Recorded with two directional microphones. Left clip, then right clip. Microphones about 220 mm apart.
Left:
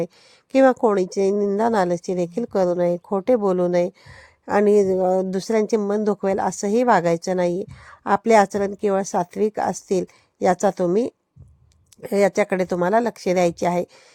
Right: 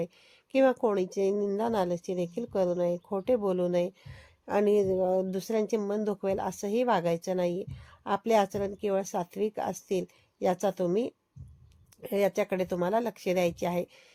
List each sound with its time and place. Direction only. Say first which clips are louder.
0.5 s a woman's voice: left 9 dB; 30° left (ahead or behind)